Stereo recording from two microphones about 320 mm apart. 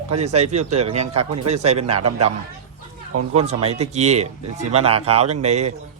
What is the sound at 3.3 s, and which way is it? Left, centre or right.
Speech, centre.